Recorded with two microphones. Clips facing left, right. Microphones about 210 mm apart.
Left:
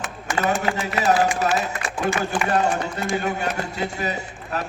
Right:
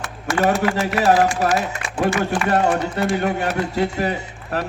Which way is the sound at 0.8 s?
60° right (ahead or behind).